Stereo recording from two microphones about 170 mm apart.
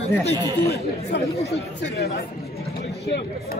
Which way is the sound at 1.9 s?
65° left (ahead or behind).